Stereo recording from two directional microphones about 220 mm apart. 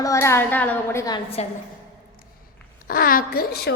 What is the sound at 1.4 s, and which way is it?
Speech, 30° left (ahead or behind).